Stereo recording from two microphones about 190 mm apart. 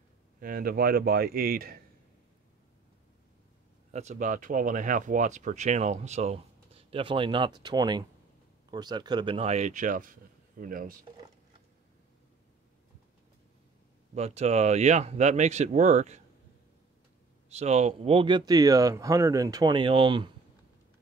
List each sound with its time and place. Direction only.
0.4 s speech: 50° right (ahead or behind)
3.9 s speech: 35° right (ahead or behind)
14.1 s speech: 35° right (ahead or behind)
17.5 s speech: 35° right (ahead or behind)